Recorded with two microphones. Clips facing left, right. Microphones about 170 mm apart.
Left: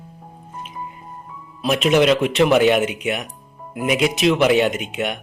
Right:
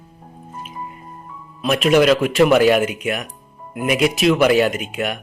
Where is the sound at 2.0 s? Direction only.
Centre (ahead or behind).